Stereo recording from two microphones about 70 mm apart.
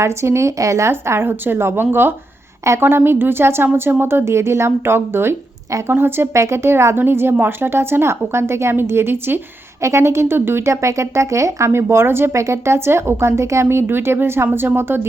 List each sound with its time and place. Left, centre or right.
0.0 s speech: right
0.9 s a woman's voice: right
6.3 s a woman's voice: right
9.8 s a woman's voice: right